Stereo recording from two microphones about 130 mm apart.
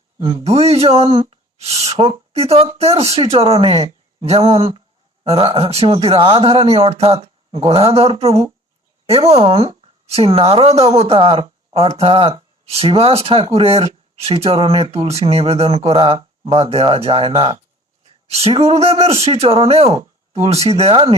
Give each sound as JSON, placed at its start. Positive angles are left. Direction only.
{"t": 0.2, "sound": "a man's voice", "side_deg": -40}
{"t": 0.4, "sound": "speech", "side_deg": -50}